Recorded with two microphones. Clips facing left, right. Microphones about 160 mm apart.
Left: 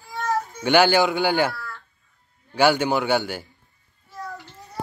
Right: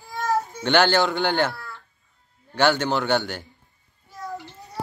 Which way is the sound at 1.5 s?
20° right (ahead or behind).